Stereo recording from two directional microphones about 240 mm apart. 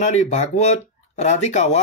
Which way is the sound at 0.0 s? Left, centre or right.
Left.